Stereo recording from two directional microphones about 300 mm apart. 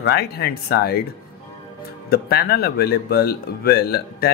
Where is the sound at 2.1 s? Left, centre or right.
Left.